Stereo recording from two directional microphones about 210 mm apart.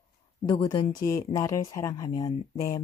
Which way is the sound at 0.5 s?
20° left (ahead or behind).